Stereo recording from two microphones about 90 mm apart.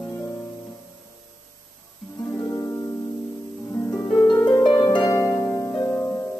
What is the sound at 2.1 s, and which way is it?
Music, 35° left (ahead or behind).